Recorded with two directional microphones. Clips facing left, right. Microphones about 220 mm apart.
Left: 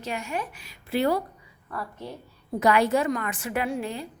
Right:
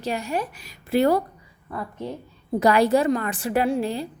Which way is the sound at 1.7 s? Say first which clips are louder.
Right 4 dB; 20° right (ahead or behind).